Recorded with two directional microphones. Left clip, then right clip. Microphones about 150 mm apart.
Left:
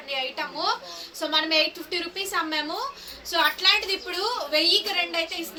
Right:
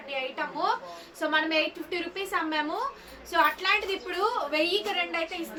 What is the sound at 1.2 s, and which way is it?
A woman's voice, 10° right (ahead or behind).